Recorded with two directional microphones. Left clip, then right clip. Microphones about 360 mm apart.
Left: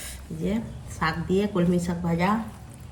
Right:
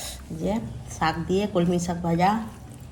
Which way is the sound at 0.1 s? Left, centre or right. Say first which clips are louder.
Right 2 dB; centre.